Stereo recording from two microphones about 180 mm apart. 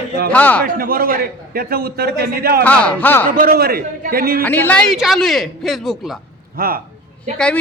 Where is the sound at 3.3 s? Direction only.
55° right (ahead or behind).